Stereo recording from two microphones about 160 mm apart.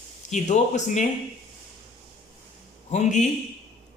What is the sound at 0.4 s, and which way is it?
Speech, 50° left (ahead or behind).